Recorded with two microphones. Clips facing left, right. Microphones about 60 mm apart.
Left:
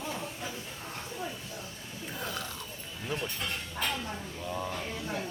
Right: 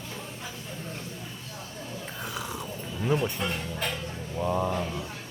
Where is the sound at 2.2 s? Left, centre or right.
Centre.